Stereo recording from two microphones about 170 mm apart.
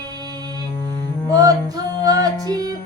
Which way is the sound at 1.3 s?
20° right (ahead or behind).